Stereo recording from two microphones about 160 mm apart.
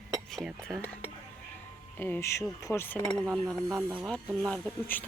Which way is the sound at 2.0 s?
15° left (ahead or behind).